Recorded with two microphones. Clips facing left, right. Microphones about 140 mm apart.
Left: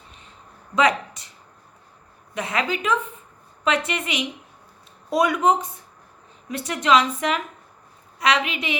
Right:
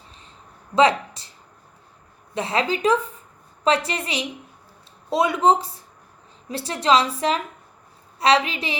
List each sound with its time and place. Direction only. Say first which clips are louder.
0.8 s speech: right 3 dB; 30° right (ahead or behind)
2.3 s a woman's voice: right 2 dB; 30° right (ahead or behind)